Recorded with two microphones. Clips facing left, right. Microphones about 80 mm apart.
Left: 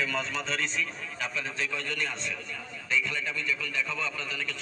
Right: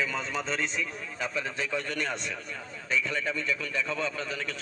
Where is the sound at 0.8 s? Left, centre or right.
Right.